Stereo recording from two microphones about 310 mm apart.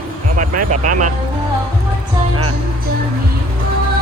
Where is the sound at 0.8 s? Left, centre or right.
Right.